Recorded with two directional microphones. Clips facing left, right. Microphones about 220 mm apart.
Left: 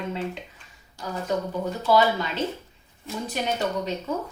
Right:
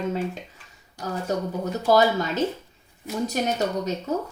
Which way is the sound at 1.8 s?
45° right (ahead or behind).